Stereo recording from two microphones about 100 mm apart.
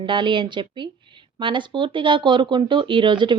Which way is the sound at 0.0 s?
55° right (ahead or behind).